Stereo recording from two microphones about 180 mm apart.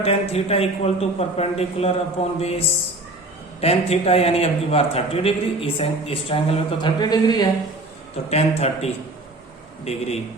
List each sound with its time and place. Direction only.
0.0 s a man's voice: 35° left (ahead or behind)
8.3 s a man's voice: 35° left (ahead or behind)